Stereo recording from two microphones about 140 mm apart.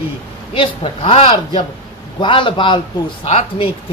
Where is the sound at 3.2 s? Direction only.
50° left (ahead or behind).